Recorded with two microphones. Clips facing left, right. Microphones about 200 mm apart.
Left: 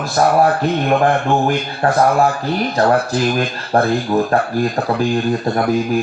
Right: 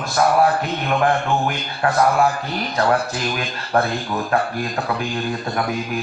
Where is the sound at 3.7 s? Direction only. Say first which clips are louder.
Left 4 dB; 30° left (ahead or behind).